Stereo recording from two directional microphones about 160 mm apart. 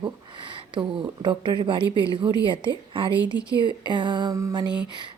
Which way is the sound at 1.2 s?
30° right (ahead or behind).